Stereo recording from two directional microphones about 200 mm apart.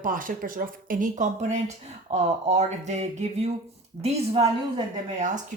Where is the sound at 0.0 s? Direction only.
40° right (ahead or behind).